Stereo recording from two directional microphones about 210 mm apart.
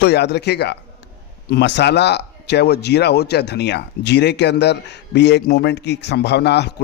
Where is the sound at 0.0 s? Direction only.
50° left (ahead or behind).